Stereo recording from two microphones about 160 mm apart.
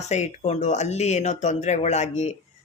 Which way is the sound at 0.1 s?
45° left (ahead or behind).